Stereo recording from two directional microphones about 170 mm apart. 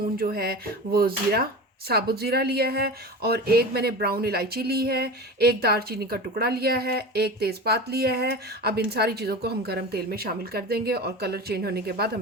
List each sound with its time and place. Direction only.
0.2 s speech: 60° right (ahead or behind)